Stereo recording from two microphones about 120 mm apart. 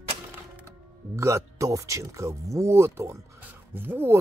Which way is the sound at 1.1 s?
25° right (ahead or behind).